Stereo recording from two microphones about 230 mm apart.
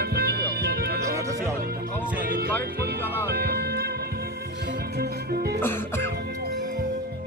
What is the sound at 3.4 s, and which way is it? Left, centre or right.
Music, right.